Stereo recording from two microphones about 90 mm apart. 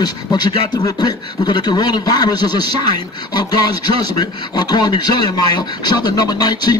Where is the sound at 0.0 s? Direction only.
50° left (ahead or behind).